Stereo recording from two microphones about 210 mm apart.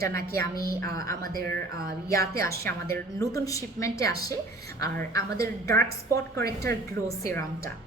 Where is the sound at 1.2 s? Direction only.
45° right (ahead or behind).